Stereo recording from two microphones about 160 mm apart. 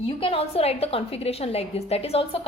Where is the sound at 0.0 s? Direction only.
35° left (ahead or behind).